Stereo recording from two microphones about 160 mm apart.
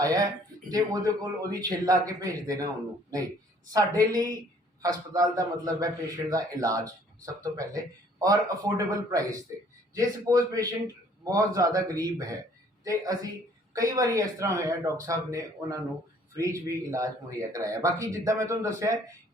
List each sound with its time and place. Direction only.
0.0 s a man's voice: 20° right (ahead or behind)
13.7 s a man's voice: 20° right (ahead or behind)